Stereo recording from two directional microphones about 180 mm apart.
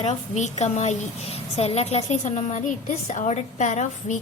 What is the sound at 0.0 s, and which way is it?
A woman's voice, 40° left (ahead or behind).